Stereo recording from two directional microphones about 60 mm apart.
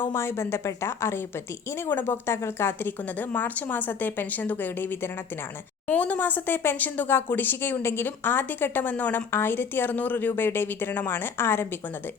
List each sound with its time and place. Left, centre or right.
0.0 s a woman's voice: left
9.3 s speech: left